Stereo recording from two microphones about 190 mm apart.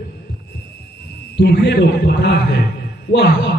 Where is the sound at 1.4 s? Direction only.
60° left (ahead or behind).